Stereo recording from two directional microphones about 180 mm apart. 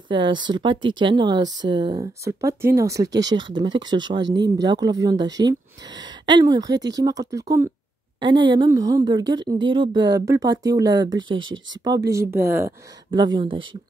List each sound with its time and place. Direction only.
0.1 s speech: 25° right (ahead or behind)
11.3 s speech: 90° right
11.8 s speech: 20° right (ahead or behind)
13.1 s speech: 25° right (ahead or behind)